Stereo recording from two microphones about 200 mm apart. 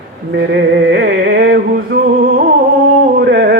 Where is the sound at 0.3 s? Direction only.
60° right (ahead or behind).